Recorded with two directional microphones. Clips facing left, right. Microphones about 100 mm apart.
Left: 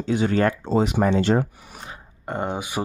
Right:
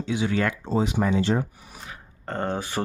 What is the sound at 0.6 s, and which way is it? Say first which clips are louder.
Speech: left 3 dB; 70° left (ahead or behind).